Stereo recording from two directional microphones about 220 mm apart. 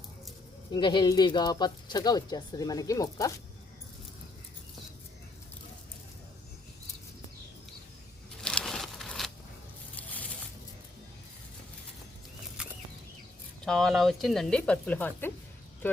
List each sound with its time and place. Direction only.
0.7 s speech: 20° left (ahead or behind)
8.4 s a sound: 5° left (ahead or behind)
13.7 s speech: centre (ahead or behind)